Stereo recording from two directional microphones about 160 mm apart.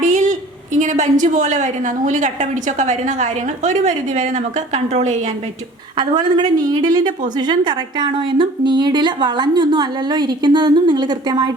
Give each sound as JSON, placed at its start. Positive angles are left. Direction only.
{"t": 0.0, "sound": "a sound", "side_deg": -50}
{"t": 1.2, "sound": "a woman's voice", "side_deg": -50}
{"t": 6.0, "sound": "a woman's voice", "side_deg": -25}